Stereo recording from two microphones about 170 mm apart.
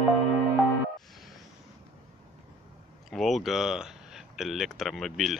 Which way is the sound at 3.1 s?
Centre (ahead or behind).